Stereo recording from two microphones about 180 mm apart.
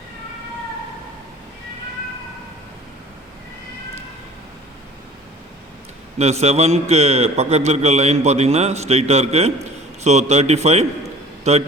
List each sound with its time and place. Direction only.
6.1 s a man's voice: 35° right (ahead or behind)